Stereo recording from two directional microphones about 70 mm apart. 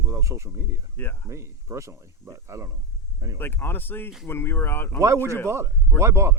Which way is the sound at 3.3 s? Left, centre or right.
Left.